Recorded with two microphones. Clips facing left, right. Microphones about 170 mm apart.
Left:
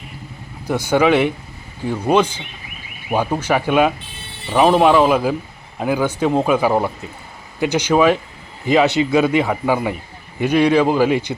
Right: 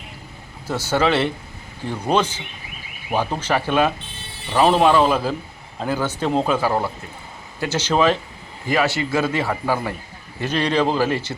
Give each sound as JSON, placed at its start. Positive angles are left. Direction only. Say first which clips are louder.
{"t": 0.7, "sound": "a man's voice", "louder": "left 5 dB", "side_deg": 15}